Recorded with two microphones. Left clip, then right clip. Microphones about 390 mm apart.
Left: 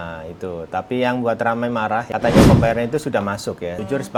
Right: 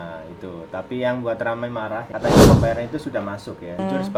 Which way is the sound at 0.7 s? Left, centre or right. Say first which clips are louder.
Left 3 dB; left.